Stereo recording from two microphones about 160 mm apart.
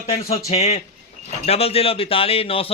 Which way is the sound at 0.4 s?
40° left (ahead or behind).